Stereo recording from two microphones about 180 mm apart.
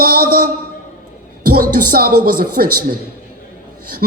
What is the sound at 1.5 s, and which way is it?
Speech, 55° right (ahead or behind).